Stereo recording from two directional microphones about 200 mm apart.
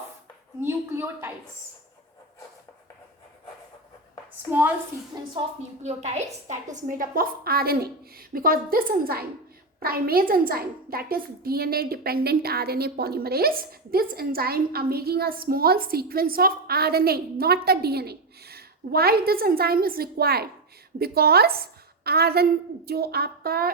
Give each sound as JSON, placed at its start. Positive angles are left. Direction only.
{"t": 0.6, "sound": "a woman's voice", "side_deg": -10}
{"t": 5.1, "sound": "a woman's voice", "side_deg": -20}
{"t": 5.8, "sound": "a woman's voice", "side_deg": -35}